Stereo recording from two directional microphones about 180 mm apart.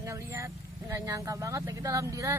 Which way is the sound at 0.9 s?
15° right (ahead or behind).